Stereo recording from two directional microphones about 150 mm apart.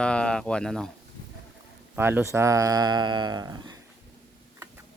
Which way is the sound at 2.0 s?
15° right (ahead or behind).